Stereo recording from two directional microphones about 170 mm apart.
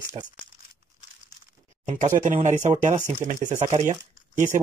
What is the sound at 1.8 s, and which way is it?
Speech, 45° right (ahead or behind).